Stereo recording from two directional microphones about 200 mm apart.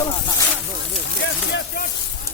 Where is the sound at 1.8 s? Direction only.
45° left (ahead or behind).